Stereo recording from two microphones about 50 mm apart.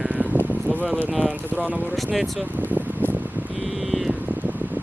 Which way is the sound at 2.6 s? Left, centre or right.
Right.